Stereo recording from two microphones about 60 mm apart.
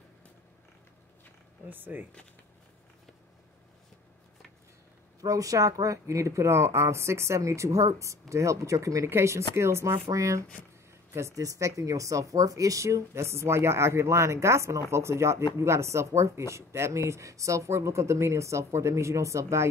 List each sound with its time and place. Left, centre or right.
1.7 s speech: right
5.2 s speech: right
10.0 s speech: right